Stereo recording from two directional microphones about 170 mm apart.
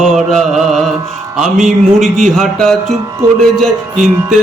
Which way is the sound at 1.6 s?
45° right (ahead or behind).